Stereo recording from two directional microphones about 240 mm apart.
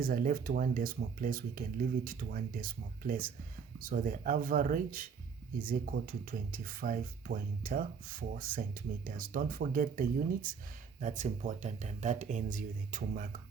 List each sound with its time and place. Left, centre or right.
0.0 s speech: right